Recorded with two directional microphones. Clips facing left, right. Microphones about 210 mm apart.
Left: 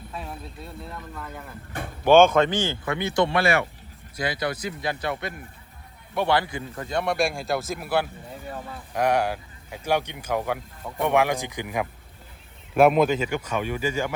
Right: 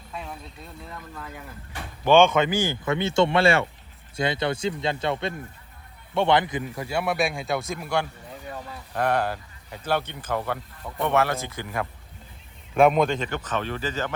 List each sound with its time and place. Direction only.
0.9 s speech: centre (ahead or behind); by 6.8 s 20° right (ahead or behind)
6.8 s speech: 5° right (ahead or behind); by 11.9 s 15° left (ahead or behind)
12.7 s speech: 5° left (ahead or behind)